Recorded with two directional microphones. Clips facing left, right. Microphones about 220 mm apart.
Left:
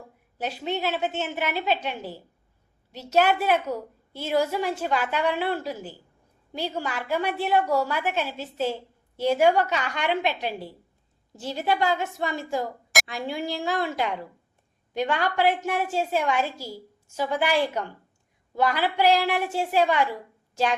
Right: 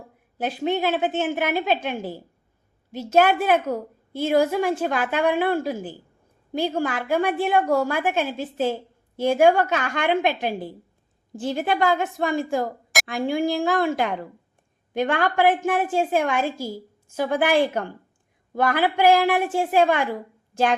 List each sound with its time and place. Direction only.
0.3 s a woman's voice: 50° right (ahead or behind)